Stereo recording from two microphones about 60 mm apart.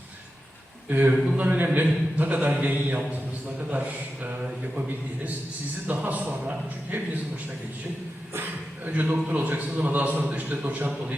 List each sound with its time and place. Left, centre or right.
0.9 s a man's voice: right
8.8 s a man's voice: right